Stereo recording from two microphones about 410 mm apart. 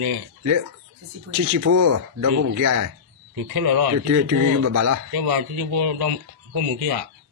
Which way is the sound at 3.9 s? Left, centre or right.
Right.